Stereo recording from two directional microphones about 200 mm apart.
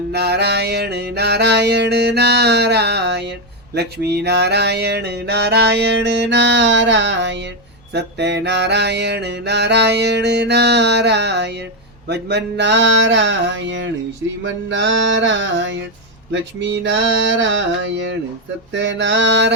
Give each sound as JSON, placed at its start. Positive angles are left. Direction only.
{"t": 0.1, "sound": "mantra", "side_deg": -55}